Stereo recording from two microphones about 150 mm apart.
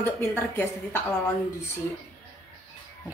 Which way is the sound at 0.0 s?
15° left (ahead or behind).